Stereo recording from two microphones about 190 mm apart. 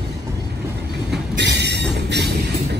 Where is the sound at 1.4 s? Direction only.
65° right (ahead or behind).